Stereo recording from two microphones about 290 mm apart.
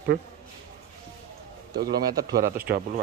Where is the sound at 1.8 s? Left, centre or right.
Right.